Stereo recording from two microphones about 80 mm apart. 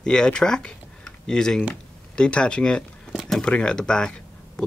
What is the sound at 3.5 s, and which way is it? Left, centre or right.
Speech, centre.